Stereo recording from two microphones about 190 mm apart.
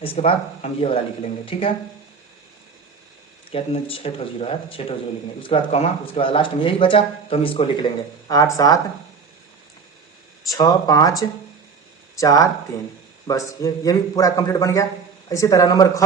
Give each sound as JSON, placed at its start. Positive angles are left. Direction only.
{"t": 0.0, "sound": "speech", "side_deg": 30}
{"t": 3.5, "sound": "speech", "side_deg": 30}
{"t": 10.5, "sound": "speech", "side_deg": 20}
{"t": 12.1, "sound": "a man's voice", "side_deg": 15}